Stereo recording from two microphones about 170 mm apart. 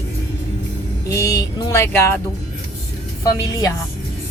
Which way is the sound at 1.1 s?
20° left (ahead or behind).